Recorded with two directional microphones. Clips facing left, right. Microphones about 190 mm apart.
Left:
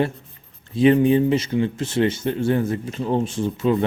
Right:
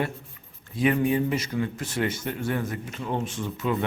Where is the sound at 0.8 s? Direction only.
30° left (ahead or behind).